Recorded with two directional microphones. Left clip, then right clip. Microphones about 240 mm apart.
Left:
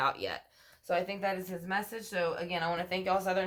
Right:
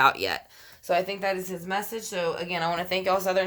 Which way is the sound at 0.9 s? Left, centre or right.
Right.